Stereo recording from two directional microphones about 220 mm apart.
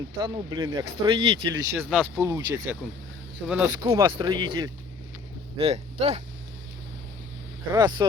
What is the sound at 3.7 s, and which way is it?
Speech, 15° right (ahead or behind).